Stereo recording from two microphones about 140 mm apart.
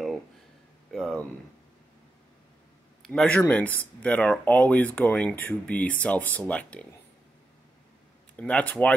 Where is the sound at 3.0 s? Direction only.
5° left (ahead or behind).